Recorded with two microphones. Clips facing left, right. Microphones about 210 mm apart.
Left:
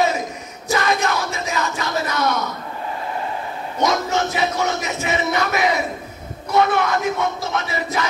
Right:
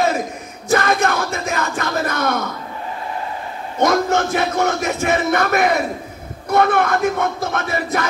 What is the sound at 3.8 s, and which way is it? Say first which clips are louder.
Music: right 4 dB; 55° right (ahead or behind).